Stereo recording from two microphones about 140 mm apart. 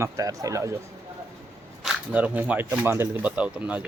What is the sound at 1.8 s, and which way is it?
Speech, 5° right (ahead or behind).